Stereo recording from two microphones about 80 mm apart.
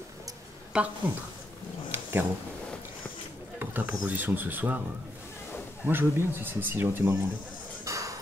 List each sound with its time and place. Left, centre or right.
0.7 s a woman's voice: centre
1.9 s purr: right
3.5 s speech: right
5.9 s speech: right
7.8 s music: right